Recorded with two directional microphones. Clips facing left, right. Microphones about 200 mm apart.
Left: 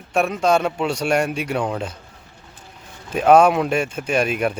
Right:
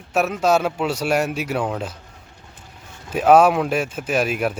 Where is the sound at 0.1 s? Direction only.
5° right (ahead or behind).